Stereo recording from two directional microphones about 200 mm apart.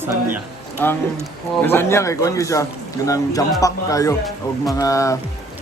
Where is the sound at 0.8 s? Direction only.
10° left (ahead or behind).